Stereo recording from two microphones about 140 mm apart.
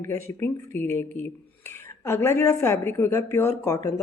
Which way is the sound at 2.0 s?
20° left (ahead or behind).